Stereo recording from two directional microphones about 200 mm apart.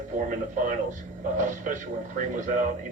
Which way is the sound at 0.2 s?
40° right (ahead or behind).